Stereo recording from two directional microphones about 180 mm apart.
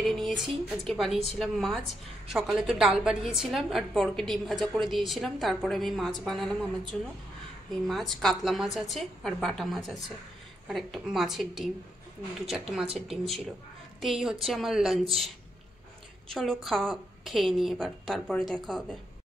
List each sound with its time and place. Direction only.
0.7 s a woman's voice: centre (ahead or behind)